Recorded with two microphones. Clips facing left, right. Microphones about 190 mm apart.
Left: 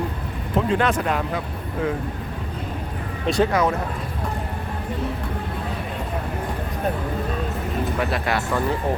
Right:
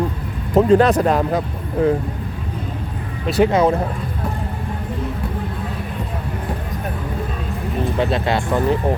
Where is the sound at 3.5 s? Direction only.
25° right (ahead or behind).